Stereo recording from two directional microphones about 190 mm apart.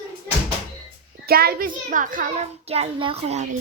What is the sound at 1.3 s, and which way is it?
A child's voice, 55° right (ahead or behind).